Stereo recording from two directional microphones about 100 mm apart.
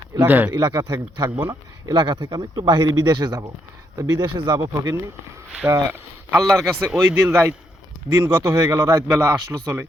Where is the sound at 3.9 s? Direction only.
35° right (ahead or behind).